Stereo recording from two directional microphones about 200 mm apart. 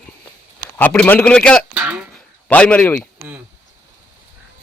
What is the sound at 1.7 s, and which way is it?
Music, 5° right (ahead or behind).